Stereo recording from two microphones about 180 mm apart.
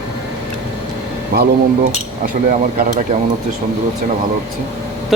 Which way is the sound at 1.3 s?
60° right (ahead or behind).